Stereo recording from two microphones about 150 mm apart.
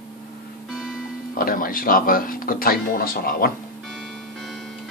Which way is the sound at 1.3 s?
75° left (ahead or behind).